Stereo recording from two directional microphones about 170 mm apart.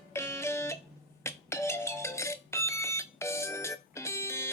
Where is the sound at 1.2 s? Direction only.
15° left (ahead or behind).